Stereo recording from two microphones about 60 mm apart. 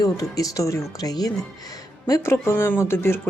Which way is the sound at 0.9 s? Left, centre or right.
Left.